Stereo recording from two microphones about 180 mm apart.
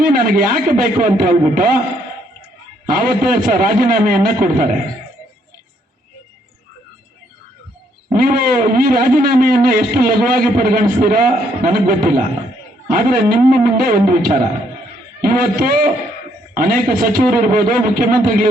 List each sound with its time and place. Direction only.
0.0 s a man's voice: 50° right (ahead or behind)
2.8 s a man's voice: 50° right (ahead or behind)
8.1 s a man's voice: 55° right (ahead or behind)